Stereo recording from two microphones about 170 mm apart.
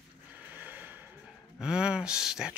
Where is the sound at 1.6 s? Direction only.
5° right (ahead or behind).